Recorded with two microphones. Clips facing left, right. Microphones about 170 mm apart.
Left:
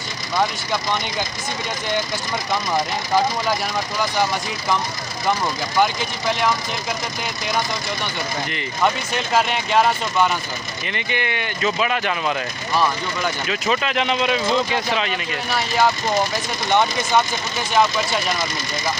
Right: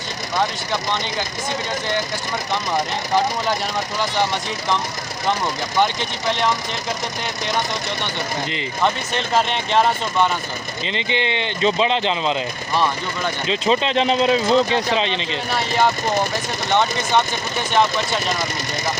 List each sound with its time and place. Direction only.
8.8 s speech: 5° left (ahead or behind)
10.8 s speech: 20° right (ahead or behind)
12.7 s speech: 5° left (ahead or behind)
13.5 s speech: 25° right (ahead or behind)